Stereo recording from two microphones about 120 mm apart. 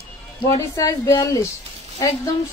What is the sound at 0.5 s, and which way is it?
Speech, 25° left (ahead or behind).